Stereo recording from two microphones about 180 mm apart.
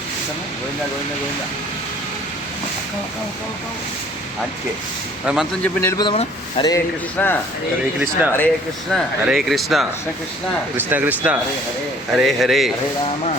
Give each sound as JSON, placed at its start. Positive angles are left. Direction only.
{"t": 5.2, "sound": "speech", "side_deg": -5}
{"t": 5.6, "sound": "speech", "side_deg": 10}
{"t": 6.0, "sound": "speech", "side_deg": 25}
{"t": 7.2, "sound": "speech", "side_deg": 5}
{"t": 7.9, "sound": "speech", "side_deg": -5}
{"t": 10.8, "sound": "speech", "side_deg": -10}